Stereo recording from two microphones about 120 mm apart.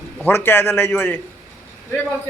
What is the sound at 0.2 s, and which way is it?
A man's voice, 20° left (ahead or behind).